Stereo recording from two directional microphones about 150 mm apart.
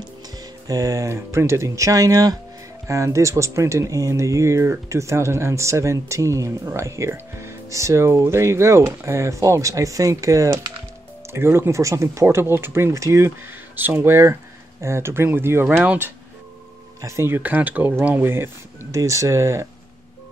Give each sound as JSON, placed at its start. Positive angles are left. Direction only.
{"t": 0.7, "sound": "speech", "side_deg": -20}